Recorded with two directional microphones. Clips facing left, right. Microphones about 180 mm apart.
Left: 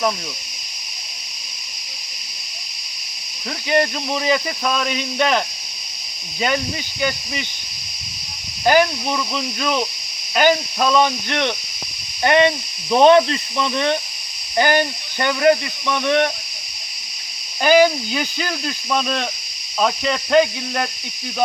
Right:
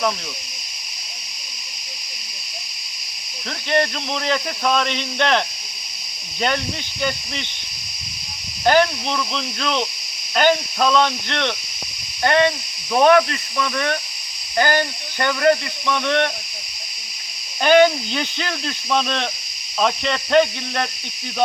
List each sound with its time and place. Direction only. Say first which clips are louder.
3.7 s speech: left 2 dB; 10° left (ahead or behind)
8.6 s speech: left 1 dB; 10° left (ahead or behind)
17.6 s speech: even; 5° left (ahead or behind)